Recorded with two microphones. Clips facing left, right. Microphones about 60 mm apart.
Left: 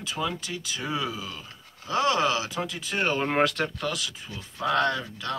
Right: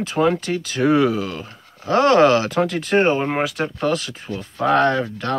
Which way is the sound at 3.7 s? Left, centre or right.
Right.